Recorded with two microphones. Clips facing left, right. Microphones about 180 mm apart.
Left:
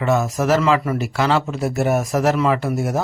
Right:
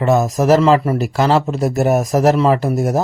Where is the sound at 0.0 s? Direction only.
40° right (ahead or behind).